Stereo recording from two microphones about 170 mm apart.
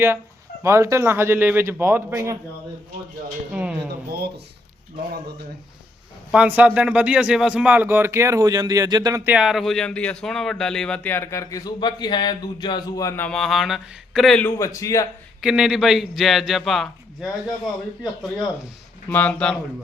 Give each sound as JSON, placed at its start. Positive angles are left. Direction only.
{"t": 0.6, "sound": "speech", "side_deg": -15}
{"t": 3.5, "sound": "speech", "side_deg": -10}
{"t": 6.3, "sound": "speech", "side_deg": -10}
{"t": 9.2, "sound": "a man's voice", "side_deg": -5}
{"t": 14.4, "sound": "a man's voice", "side_deg": 20}
{"t": 15.4, "sound": "a man's voice", "side_deg": -5}
{"t": 19.0, "sound": "speech", "side_deg": 10}